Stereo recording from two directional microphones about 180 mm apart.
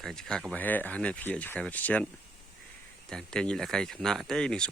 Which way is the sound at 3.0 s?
5° left (ahead or behind).